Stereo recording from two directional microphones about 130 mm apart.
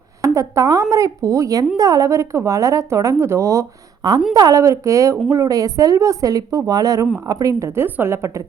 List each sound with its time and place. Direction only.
0.2 s speech: 25° right (ahead or behind)